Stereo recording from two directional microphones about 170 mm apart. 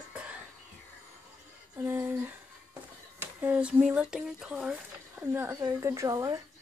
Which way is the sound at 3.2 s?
10° right (ahead or behind).